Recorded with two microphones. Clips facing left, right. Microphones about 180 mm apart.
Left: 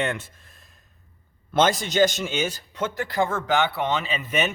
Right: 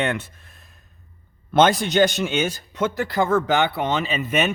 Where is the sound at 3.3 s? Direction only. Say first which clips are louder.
Right 4 dB; 40° right (ahead or behind); by 4.5 s 55° right (ahead or behind).